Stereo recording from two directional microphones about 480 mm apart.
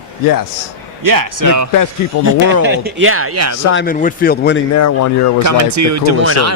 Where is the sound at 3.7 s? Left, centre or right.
Centre.